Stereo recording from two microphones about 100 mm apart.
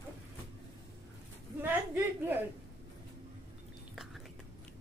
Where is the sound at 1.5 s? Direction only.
20° right (ahead or behind).